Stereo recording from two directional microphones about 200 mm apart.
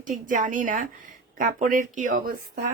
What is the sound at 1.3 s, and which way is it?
Speech, 40° right (ahead or behind).